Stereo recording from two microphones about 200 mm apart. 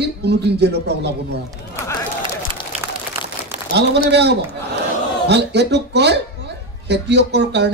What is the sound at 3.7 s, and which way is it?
Speech, 60° right (ahead or behind).